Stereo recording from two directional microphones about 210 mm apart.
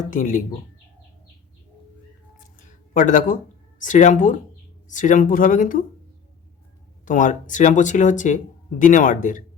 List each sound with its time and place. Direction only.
0.1 s speech: 40° left (ahead or behind)
2.4 s a sound: 40° left (ahead or behind)
3.8 s speech: 35° left (ahead or behind)
7.0 s speech: 40° left (ahead or behind)